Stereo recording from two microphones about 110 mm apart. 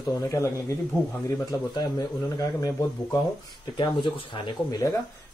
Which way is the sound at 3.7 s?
45° left (ahead or behind).